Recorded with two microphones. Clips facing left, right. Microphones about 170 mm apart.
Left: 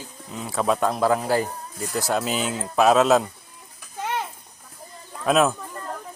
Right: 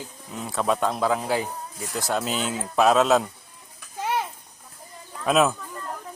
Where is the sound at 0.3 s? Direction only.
Centre (ahead or behind).